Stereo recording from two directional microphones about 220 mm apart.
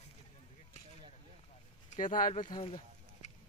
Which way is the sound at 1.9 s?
35° left (ahead or behind).